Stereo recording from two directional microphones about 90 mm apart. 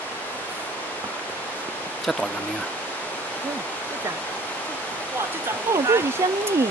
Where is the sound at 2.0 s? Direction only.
5° left (ahead or behind).